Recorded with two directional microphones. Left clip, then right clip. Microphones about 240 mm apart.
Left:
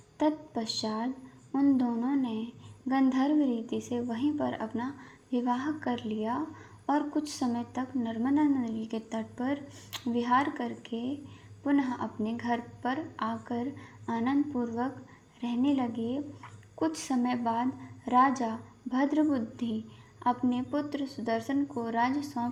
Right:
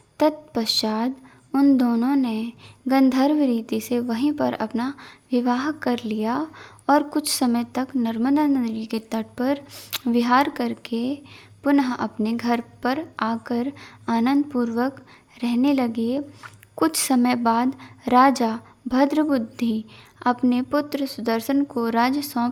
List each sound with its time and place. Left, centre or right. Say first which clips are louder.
0.3 s a woman's voice: right 7 dB; right
15.4 s a woman's voice: right 8 dB; right